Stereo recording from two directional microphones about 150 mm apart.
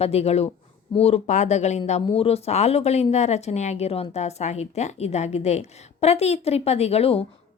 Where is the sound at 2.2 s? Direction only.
45° left (ahead or behind).